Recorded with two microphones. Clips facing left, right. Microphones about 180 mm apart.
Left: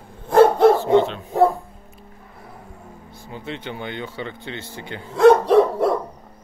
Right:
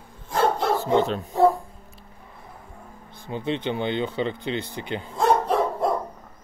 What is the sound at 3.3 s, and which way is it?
Speech, 20° right (ahead or behind).